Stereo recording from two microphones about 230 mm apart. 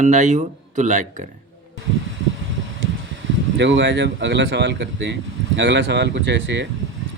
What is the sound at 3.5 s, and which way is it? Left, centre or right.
Speech, right.